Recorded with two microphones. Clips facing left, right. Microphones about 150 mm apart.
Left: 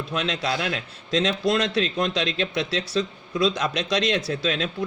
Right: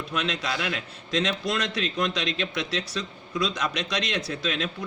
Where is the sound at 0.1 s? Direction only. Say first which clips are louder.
Left 3 dB; 30° left (ahead or behind).